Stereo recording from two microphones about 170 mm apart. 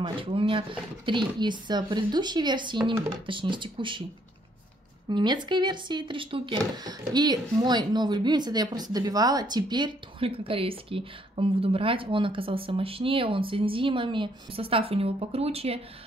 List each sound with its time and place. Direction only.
0.0 s speech: 30° right (ahead or behind)
5.1 s speech: 25° right (ahead or behind)